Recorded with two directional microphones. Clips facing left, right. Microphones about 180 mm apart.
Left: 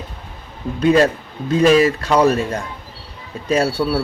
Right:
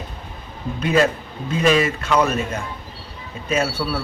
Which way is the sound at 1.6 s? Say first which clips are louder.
Left 5 dB; 35° left (ahead or behind).